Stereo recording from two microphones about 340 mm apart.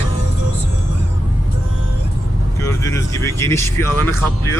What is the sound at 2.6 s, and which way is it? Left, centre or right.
Speech, centre.